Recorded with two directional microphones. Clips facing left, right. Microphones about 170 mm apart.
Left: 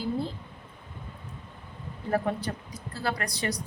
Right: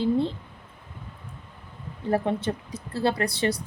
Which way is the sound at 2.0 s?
25° right (ahead or behind).